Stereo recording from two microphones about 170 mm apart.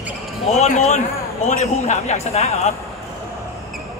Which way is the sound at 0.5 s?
40° left (ahead or behind).